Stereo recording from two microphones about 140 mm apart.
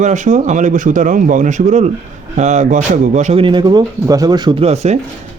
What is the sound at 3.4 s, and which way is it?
Speech, 35° right (ahead or behind).